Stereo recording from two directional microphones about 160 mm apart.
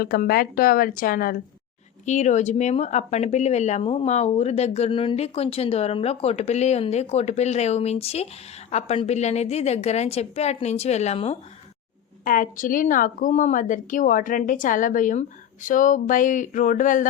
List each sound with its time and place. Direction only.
0.0 s a woman's voice: 70° left (ahead or behind)
2.0 s a woman's voice: 50° left (ahead or behind)
12.2 s a woman's voice: 60° left (ahead or behind)